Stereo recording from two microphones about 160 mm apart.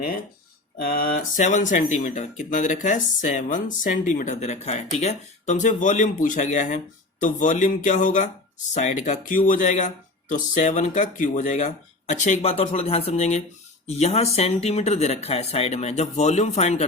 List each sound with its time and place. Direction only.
0.8 s speech: 65° left (ahead or behind); by 16.8 s 45° left (ahead or behind)